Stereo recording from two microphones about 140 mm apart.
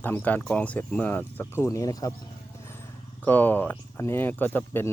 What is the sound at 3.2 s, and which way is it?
Speech, 15° left (ahead or behind).